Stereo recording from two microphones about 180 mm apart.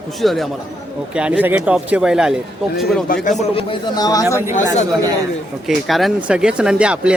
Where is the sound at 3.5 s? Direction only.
25° left (ahead or behind).